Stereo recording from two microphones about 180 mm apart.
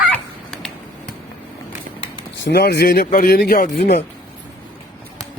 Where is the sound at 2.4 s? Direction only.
65° left (ahead or behind).